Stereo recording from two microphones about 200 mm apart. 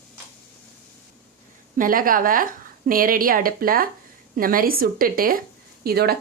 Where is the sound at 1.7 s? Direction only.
45° right (ahead or behind).